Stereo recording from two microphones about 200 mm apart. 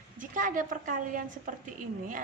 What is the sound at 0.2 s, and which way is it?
A woman's voice, 40° right (ahead or behind).